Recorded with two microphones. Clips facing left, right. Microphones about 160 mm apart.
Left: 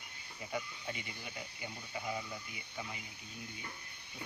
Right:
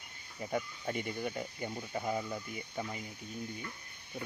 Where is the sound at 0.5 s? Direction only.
50° right (ahead or behind).